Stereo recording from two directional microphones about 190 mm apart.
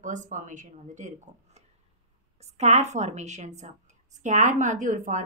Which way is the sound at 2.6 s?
35° right (ahead or behind).